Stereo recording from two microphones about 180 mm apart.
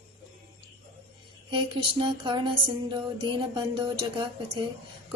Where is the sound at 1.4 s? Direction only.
25° right (ahead or behind).